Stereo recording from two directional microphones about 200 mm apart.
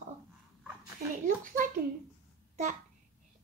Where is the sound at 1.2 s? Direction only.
40° right (ahead or behind).